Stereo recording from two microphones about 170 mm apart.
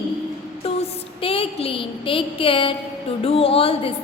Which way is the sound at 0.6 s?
35° left (ahead or behind).